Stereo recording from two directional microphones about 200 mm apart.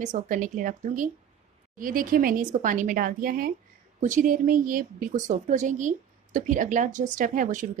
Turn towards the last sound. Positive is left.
turn(degrees=-40)  # may be behind; listen again after turning